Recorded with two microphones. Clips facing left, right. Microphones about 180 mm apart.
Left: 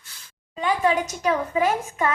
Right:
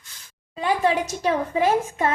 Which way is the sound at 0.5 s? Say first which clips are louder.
Even; 35° right (ahead or behind).